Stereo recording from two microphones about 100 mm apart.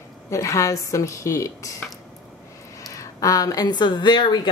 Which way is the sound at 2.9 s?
35° left (ahead or behind).